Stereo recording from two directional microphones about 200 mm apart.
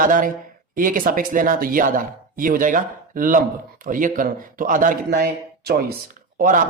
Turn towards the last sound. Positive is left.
turn(degrees=-40)  # may be behind; listen again after turning